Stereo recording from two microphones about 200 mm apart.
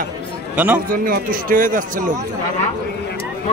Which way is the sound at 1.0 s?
45° right (ahead or behind).